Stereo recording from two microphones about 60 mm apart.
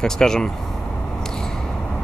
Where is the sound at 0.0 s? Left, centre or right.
Centre.